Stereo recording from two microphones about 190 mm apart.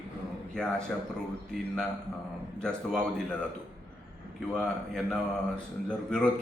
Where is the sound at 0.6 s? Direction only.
5° left (ahead or behind).